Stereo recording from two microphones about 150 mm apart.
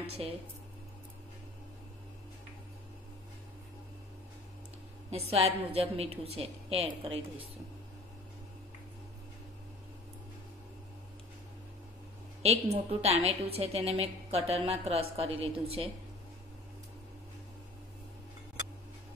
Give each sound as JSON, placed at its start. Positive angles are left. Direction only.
{"t": 0.2, "sound": "a woman's voice", "side_deg": -40}
{"t": 5.1, "sound": "a woman's voice", "side_deg": -40}
{"t": 12.4, "sound": "a woman's voice", "side_deg": -45}